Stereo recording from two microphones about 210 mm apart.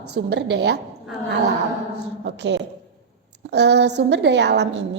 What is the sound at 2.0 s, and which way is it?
A woman's voice, 55° right (ahead or behind).